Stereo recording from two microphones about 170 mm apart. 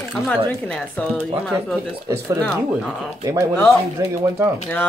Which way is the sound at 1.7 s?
15° right (ahead or behind).